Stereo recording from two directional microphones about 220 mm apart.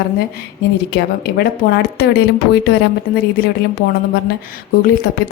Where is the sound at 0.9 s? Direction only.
50° left (ahead or behind).